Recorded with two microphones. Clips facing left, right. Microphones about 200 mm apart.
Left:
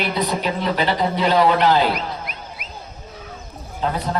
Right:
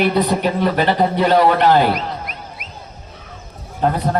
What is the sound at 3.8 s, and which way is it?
Speech, 55° right (ahead or behind).